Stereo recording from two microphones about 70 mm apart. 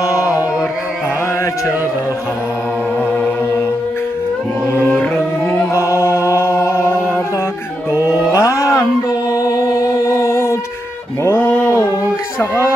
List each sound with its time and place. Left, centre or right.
0.0 s carnatic music: left
5.1 s music: left
7.9 s mantra: centre
8.3 s a sound: left
9.3 s music: left
11.2 s music: left